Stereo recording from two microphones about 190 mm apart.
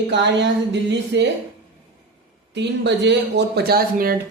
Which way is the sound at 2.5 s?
65° right (ahead or behind).